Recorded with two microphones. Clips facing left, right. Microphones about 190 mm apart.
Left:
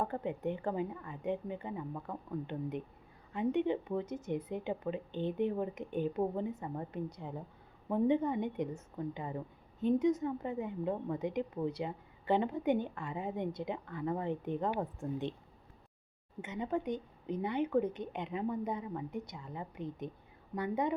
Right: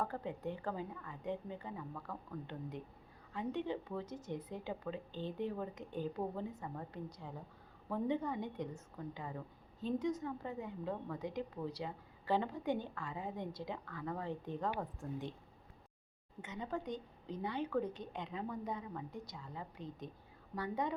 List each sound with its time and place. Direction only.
0.0 s a woman's voice: 20° left (ahead or behind)
16.4 s a woman's voice: 20° left (ahead or behind)